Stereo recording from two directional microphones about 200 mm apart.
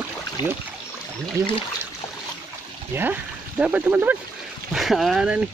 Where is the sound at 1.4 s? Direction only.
15° right (ahead or behind).